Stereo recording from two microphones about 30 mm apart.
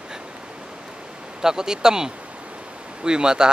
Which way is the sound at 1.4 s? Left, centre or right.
Right.